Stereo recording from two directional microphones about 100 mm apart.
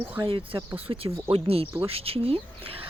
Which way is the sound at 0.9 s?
55° right (ahead or behind).